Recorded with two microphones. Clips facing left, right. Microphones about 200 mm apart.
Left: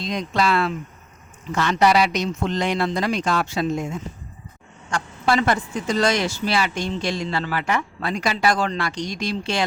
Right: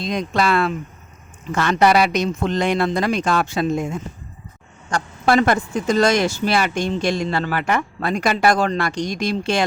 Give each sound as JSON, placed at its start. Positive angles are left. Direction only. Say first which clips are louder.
{"t": 0.0, "sound": "speech", "louder": "right 2 dB", "side_deg": -55}